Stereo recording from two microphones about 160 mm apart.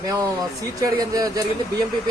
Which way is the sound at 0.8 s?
20° right (ahead or behind).